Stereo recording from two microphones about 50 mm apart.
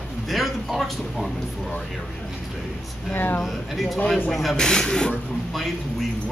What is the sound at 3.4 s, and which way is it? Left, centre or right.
A man's voice, centre.